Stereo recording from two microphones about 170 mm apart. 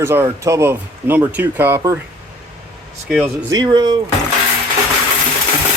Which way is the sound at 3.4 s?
25° right (ahead or behind).